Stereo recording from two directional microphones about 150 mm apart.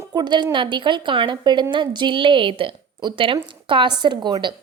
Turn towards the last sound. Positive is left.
turn(degrees=-30)  # may be behind; listen again after turning